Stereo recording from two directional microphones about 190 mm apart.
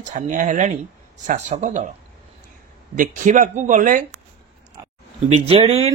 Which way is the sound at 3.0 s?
40° right (ahead or behind).